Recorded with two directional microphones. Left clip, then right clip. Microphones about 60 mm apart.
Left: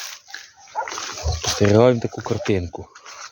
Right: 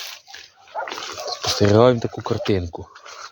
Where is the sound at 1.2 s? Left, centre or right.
Centre.